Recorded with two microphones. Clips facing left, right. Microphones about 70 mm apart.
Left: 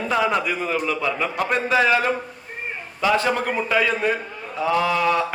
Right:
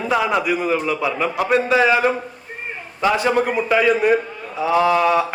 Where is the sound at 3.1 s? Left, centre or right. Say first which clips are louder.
Right 2 dB; centre.